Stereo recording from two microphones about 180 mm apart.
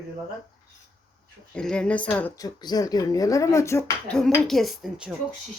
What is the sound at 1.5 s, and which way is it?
Speech, 5° left (ahead or behind).